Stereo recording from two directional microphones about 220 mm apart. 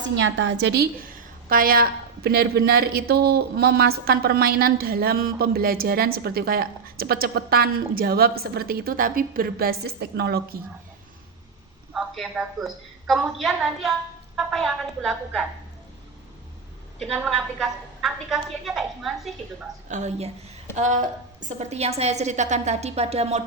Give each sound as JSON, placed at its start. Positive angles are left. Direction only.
{"t": 0.0, "sound": "a woman's voice", "side_deg": -55}
{"t": 11.9, "sound": "a woman's voice", "side_deg": 0}
{"t": 17.0, "sound": "a woman's voice", "side_deg": 0}
{"t": 19.9, "sound": "a woman's voice", "side_deg": -30}